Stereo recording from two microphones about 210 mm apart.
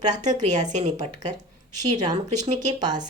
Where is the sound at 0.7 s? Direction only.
35° right (ahead or behind).